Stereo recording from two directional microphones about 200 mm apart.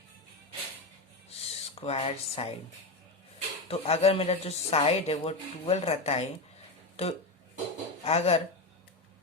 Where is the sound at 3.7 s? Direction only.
30° left (ahead or behind).